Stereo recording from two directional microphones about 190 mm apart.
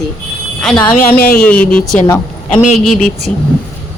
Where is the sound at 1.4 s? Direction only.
5° left (ahead or behind).